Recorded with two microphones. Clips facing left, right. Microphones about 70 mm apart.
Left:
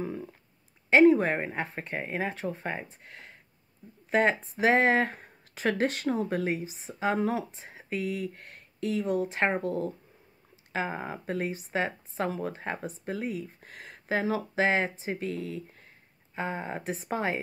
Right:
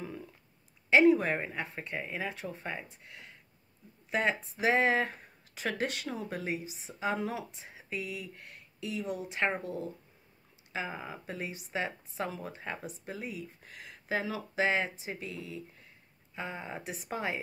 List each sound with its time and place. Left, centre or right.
0.0 s a sound: left
0.8 s speech: left
10.7 s speech: left
16.3 s speech: left